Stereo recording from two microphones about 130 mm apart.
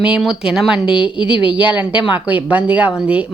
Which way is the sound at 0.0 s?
5° right (ahead or behind).